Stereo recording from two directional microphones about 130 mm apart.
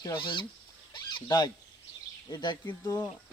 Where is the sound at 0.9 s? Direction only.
35° left (ahead or behind).